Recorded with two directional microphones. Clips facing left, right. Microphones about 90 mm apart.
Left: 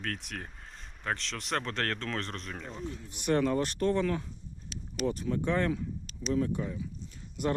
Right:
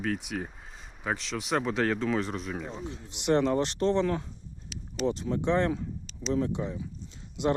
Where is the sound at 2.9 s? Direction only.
25° right (ahead or behind).